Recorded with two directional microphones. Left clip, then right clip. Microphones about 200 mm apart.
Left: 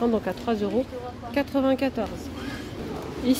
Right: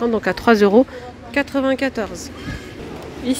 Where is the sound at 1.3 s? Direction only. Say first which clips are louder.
Right 5 dB; 5° right (ahead or behind).